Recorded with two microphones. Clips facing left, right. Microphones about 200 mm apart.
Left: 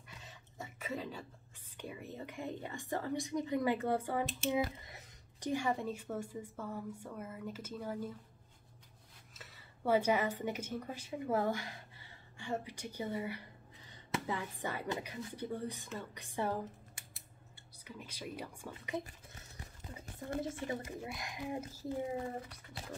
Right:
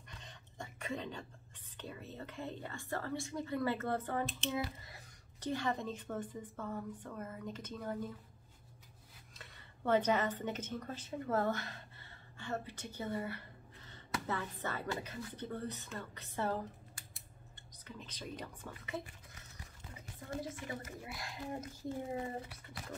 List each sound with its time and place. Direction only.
0.1 s a sound: 5° left (ahead or behind)
1.8 s a woman's voice: 15° left (ahead or behind)
9.4 s a woman's voice: 5° left (ahead or behind)
18.7 s speech: 20° left (ahead or behind)
20.5 s speech: 30° left (ahead or behind)
22.1 s speech: 5° right (ahead or behind)